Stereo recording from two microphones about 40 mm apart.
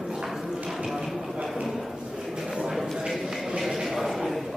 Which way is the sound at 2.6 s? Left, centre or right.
Centre.